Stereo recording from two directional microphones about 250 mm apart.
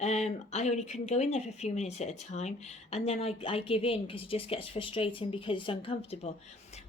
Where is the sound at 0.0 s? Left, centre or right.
Left.